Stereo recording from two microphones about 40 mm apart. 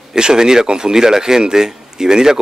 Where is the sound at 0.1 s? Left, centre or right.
Centre.